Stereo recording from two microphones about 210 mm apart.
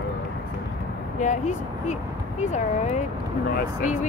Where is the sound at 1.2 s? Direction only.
35° left (ahead or behind).